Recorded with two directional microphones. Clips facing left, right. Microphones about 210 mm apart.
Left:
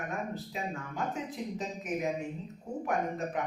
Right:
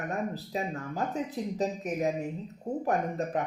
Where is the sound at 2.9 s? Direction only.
35° right (ahead or behind).